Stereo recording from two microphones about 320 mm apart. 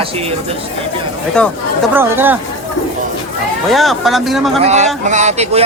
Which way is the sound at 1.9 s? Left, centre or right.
Centre.